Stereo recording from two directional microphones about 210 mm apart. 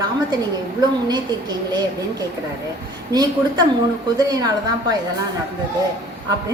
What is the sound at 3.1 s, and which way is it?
Speech, 20° right (ahead or behind).